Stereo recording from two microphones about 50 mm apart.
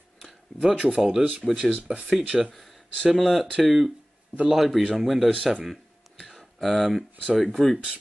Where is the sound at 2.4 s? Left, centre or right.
Centre.